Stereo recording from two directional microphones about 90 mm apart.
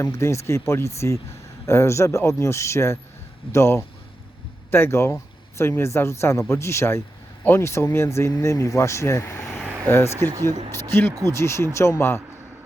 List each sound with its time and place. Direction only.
0.0 s speech: 35° left (ahead or behind)
11.3 s speech: 30° left (ahead or behind)